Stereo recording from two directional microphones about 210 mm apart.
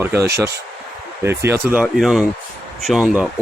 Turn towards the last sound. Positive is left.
turn(degrees=0)  # may be behind; listen again after turning